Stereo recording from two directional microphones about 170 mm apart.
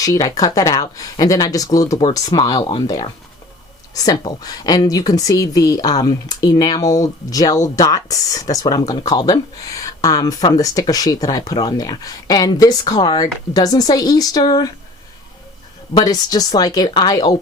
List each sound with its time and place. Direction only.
0.0 s a woman's voice: 20° left (ahead or behind)
16.0 s a woman's voice: 25° left (ahead or behind)